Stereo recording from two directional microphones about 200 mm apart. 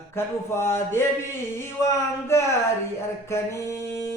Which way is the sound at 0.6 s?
10° left (ahead or behind).